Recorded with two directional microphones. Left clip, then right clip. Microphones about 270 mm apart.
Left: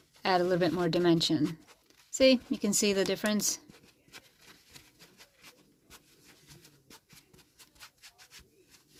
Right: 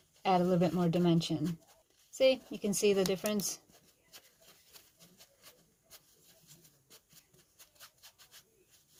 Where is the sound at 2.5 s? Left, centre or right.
Left.